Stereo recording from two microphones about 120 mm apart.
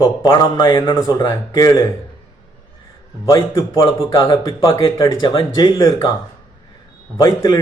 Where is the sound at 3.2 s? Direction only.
25° left (ahead or behind).